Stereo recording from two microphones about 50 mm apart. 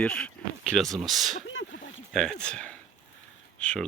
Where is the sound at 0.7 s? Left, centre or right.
Centre.